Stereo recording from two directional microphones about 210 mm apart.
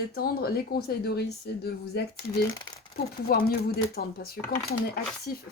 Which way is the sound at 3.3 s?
45° left (ahead or behind).